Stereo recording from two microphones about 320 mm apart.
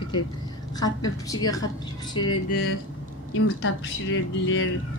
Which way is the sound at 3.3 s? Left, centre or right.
Left.